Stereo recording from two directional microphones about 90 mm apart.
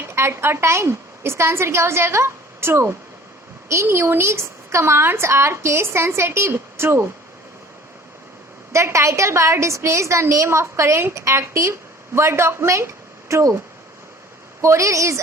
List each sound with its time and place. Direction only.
0.0 s a woman's voice: 30° right (ahead or behind)
8.7 s a woman's voice: 35° right (ahead or behind)
14.6 s a woman's voice: 35° right (ahead or behind)